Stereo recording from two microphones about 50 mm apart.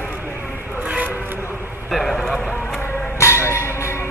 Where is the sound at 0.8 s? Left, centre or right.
Right.